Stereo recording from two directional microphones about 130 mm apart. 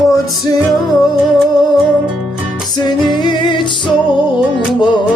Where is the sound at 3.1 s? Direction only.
35° left (ahead or behind).